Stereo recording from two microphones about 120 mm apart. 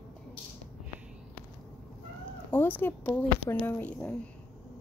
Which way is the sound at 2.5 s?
15° left (ahead or behind).